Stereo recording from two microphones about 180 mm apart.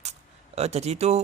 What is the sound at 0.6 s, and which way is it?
Speech, 35° right (ahead or behind).